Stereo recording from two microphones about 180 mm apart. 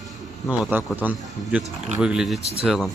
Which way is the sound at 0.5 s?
10° right (ahead or behind).